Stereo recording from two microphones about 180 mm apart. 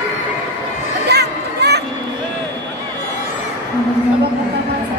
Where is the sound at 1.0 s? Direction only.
65° right (ahead or behind).